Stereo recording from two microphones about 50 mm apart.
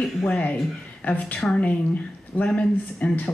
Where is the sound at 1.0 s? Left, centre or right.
Left.